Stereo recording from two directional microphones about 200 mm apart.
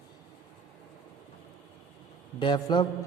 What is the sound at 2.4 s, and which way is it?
Speech, 20° left (ahead or behind).